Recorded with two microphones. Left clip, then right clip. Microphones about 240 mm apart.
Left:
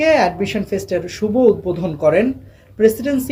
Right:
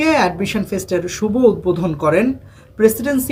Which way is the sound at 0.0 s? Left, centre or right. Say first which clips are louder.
Left 1 dB; centre.